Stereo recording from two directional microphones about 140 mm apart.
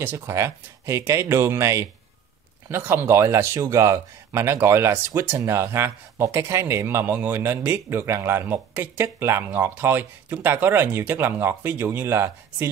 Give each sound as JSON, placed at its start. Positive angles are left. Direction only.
{"t": 0.0, "sound": "speech", "side_deg": -20}